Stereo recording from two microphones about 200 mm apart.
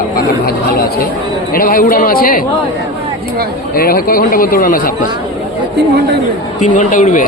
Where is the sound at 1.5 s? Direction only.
45° left (ahead or behind).